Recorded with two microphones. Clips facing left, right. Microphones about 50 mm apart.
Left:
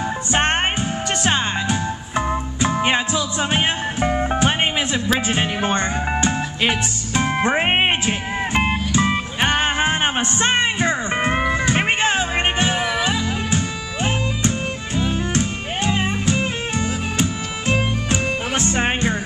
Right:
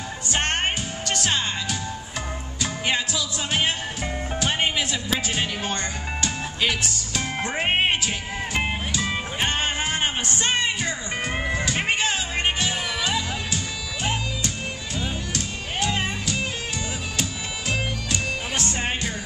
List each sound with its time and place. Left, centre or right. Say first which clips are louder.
0.3 s music: left 5 dB; left
17.2 s music: left 6 dB; left